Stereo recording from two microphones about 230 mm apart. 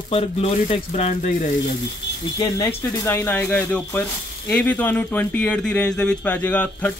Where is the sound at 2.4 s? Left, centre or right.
Centre.